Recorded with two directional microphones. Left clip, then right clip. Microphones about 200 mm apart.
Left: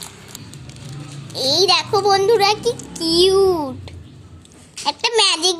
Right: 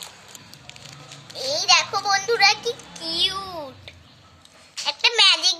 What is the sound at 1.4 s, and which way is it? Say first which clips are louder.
A child's voice: left 3 dB; 30° left (ahead or behind).